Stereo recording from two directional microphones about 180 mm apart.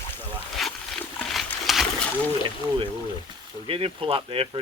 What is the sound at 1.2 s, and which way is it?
Splash, centre (ahead or behind).